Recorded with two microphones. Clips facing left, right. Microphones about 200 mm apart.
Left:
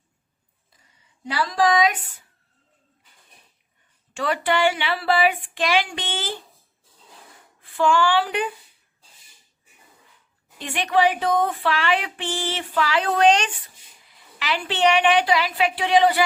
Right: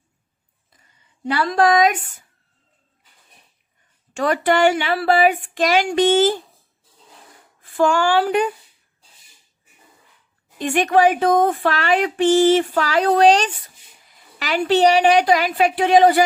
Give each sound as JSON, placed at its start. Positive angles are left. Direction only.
{"t": 1.2, "sound": "speech", "side_deg": -55}
{"t": 4.1, "sound": "speech", "side_deg": -45}
{"t": 7.6, "sound": "speech", "side_deg": -45}
{"t": 10.6, "sound": "speech", "side_deg": -45}